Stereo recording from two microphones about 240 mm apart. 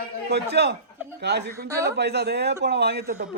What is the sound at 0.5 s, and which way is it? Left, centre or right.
A man's voice, right.